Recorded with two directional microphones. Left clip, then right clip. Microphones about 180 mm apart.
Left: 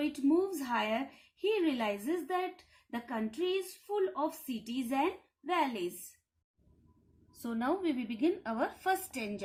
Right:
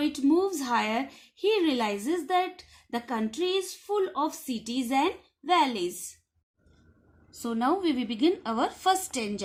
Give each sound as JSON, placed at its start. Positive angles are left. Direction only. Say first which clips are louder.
{"t": 0.0, "sound": "a woman's voice", "louder": "right 6 dB", "side_deg": -45}
{"t": 7.4, "sound": "a woman's voice", "louder": "right 7 dB", "side_deg": -30}